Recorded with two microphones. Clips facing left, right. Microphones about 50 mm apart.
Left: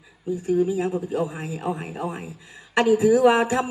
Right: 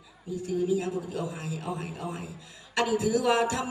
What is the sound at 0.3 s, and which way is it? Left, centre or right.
Speech, left.